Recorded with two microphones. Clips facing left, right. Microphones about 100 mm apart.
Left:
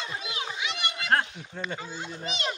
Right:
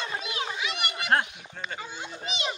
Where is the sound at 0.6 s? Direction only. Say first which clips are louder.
Right 1 dB; 25° left (ahead or behind).